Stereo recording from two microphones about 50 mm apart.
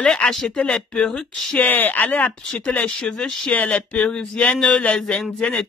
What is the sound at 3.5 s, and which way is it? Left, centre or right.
Speech, left.